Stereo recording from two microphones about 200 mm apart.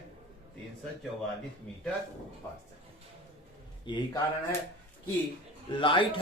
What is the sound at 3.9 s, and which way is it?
Speech, 25° left (ahead or behind).